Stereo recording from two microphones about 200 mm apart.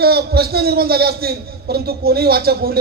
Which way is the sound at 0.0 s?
50° right (ahead or behind).